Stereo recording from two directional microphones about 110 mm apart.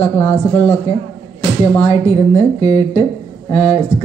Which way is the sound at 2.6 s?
75° left (ahead or behind).